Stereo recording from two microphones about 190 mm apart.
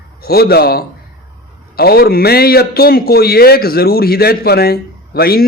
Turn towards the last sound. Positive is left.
turn(degrees=55)  # may be behind; listen again after turning